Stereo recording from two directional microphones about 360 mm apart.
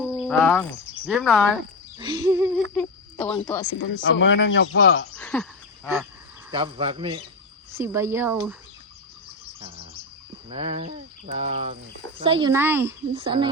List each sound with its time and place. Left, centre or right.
0.0 s speech: centre
2.0 s speech: centre
3.8 s speech: left
5.1 s a sound: centre
6.5 s speech: centre
10.5 s speech: centre